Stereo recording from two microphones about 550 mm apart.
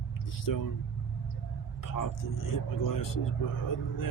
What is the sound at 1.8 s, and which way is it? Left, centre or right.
Speech, left.